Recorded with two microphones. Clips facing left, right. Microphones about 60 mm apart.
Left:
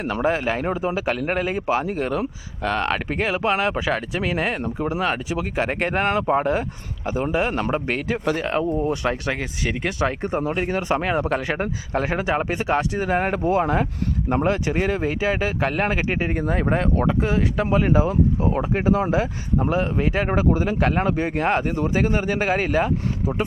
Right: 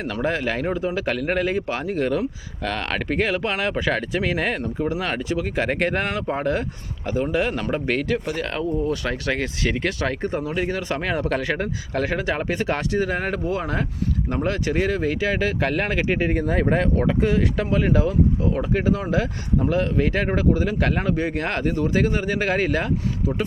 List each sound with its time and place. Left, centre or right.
0.0 s speech: centre
6.1 s speech: left
6.3 s speech: centre
13.0 s speech: left
18.1 s speech: left; by 20.4 s centre
20.4 s speech: left
21.3 s speech: centre